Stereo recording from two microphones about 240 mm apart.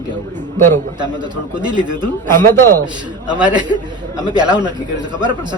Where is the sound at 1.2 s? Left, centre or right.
Centre.